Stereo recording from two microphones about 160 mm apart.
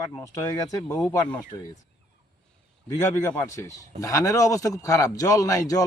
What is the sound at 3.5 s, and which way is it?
A man's voice, 20° left (ahead or behind).